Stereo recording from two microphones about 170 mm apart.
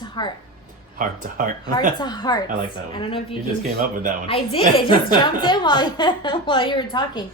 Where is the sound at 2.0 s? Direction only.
25° left (ahead or behind).